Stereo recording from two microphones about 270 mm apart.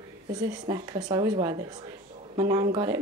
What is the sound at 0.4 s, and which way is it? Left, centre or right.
Speech, centre.